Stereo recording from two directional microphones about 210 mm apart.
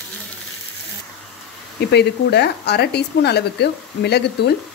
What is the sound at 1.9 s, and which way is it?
Speech, 50° left (ahead or behind).